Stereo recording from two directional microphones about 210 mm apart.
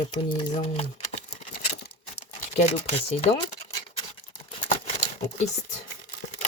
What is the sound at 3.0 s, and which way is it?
Speech, 30° left (ahead or behind).